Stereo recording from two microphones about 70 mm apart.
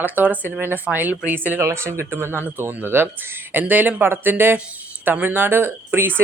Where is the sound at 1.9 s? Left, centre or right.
Right.